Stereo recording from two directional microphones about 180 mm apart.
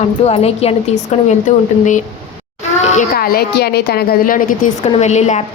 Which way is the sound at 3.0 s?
55° left (ahead or behind).